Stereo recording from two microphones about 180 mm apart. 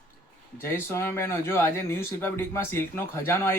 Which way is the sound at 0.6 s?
15° left (ahead or behind).